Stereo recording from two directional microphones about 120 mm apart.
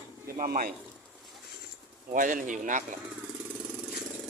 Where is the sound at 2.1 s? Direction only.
90° right.